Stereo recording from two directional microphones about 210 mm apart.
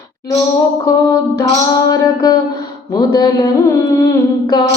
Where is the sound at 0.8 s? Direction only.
15° left (ahead or behind).